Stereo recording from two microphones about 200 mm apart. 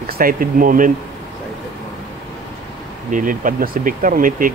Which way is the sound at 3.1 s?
40° right (ahead or behind).